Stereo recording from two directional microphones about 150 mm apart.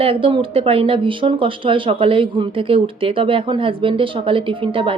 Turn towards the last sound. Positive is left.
turn(degrees=-35)  # may be behind; listen again after turning